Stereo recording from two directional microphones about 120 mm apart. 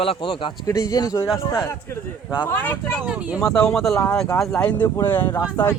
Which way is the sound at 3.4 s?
5° left (ahead or behind).